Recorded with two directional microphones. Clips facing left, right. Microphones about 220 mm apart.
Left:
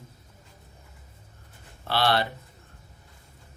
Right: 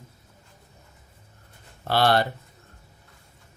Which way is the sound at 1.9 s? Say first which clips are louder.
Right 4 dB; 45° right (ahead or behind).